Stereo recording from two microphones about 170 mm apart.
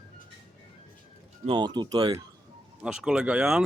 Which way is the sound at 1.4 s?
30° right (ahead or behind).